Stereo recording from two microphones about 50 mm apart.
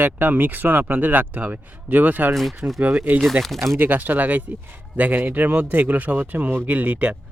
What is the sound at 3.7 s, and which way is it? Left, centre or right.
Speech, right.